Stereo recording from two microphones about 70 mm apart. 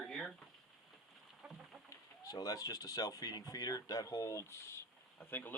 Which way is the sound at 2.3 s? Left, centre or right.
Left.